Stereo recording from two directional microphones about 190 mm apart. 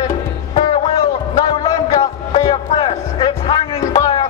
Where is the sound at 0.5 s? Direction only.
30° left (ahead or behind).